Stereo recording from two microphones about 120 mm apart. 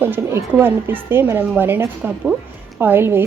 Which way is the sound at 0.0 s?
20° right (ahead or behind).